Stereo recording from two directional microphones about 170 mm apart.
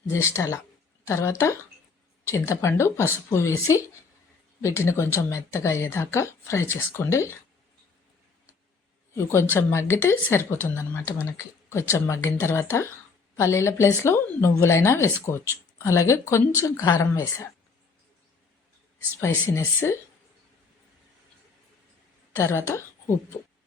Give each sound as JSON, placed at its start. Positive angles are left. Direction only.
{"t": 0.1, "sound": "speech", "side_deg": 15}
{"t": 9.1, "sound": "speech", "side_deg": 15}
{"t": 19.2, "sound": "speech", "side_deg": 15}
{"t": 22.4, "sound": "a woman's voice", "side_deg": 15}